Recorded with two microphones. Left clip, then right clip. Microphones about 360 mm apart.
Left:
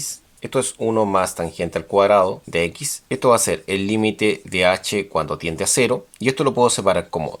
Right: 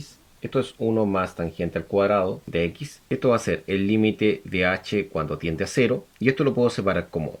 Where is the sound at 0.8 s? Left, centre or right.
Left.